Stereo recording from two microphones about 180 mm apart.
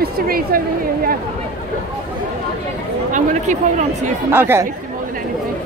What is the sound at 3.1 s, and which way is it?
Speech, 45° right (ahead or behind).